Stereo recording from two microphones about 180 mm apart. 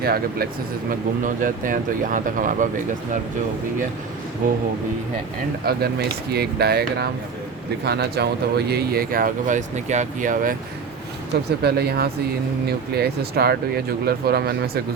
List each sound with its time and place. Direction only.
0.0 s speech: 60° right (ahead or behind)
0.9 s speech: 50° right (ahead or behind)
5.7 s speech: 60° right (ahead or behind)
11.6 s speech: 60° right (ahead or behind)